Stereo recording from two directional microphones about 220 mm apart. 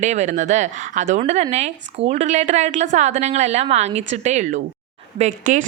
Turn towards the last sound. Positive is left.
turn(degrees=-35)  # may be behind; listen again after turning